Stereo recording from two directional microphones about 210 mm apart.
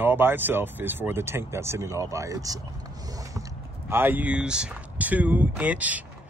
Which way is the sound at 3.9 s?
10° right (ahead or behind).